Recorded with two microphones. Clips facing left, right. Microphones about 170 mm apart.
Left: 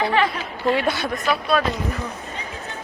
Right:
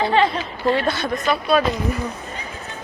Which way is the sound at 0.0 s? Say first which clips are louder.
Right 2 dB; 25° right (ahead or behind).